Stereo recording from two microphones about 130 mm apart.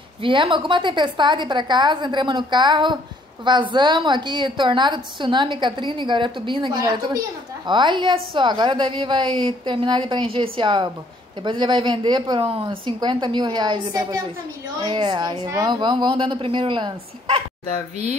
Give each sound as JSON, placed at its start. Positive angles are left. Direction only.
{"t": 0.2, "sound": "a woman's voice", "side_deg": -40}